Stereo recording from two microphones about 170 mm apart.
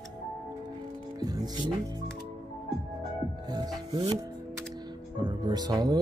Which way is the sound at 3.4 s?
25° right (ahead or behind).